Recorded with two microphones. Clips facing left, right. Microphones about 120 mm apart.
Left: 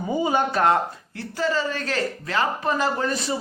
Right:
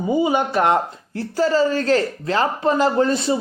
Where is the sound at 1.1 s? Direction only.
35° right (ahead or behind).